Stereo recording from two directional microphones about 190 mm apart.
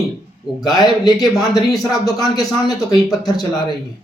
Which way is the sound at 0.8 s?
Centre (ahead or behind).